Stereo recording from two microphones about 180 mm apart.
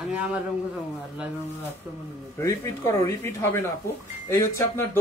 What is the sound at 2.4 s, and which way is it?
Speech, 15° left (ahead or behind).